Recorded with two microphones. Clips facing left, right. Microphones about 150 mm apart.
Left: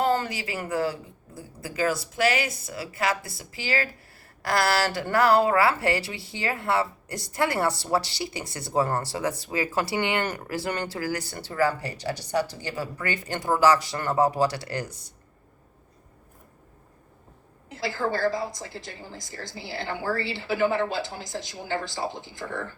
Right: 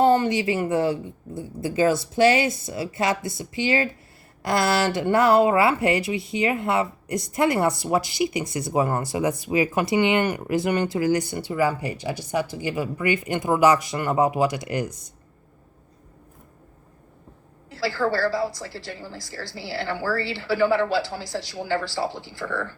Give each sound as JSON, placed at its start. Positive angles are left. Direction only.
{"t": 0.0, "sound": "speech", "side_deg": -25}
{"t": 17.7, "sound": "a woman's voice", "side_deg": 20}